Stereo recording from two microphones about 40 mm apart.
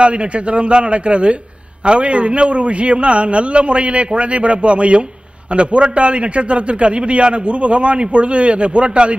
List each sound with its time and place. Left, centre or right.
0.0 s a man's voice: right